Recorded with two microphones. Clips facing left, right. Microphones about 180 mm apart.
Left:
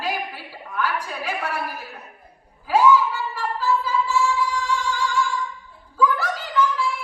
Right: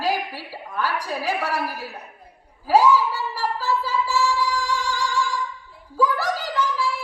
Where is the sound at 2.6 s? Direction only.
35° right (ahead or behind).